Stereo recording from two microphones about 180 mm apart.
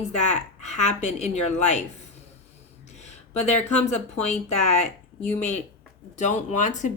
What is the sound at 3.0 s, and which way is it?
A woman's voice, 40° left (ahead or behind).